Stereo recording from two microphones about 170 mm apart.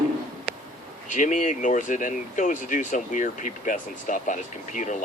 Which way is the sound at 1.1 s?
50° left (ahead or behind).